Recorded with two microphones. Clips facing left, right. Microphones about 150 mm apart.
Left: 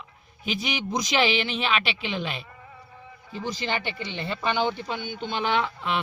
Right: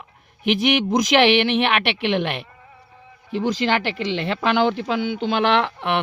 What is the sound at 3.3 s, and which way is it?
Speech, 90° right.